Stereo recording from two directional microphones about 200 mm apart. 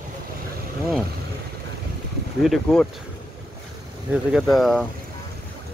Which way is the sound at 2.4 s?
Centre (ahead or behind).